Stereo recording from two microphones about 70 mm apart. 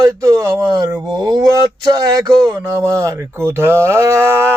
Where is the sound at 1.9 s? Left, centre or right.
Right.